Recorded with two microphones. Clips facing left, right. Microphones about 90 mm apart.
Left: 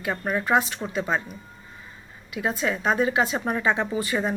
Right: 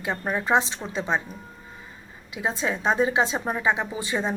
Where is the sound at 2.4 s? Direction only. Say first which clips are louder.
Left 1 dB; 25° right (ahead or behind).